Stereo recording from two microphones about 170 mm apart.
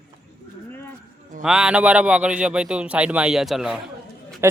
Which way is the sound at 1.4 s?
5° right (ahead or behind).